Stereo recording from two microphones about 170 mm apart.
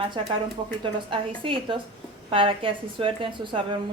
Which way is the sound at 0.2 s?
30° right (ahead or behind).